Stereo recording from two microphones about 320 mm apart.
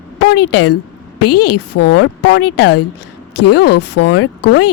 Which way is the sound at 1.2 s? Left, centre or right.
Left.